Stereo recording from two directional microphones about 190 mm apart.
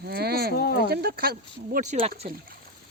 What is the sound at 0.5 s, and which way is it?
Speech, 55° left (ahead or behind).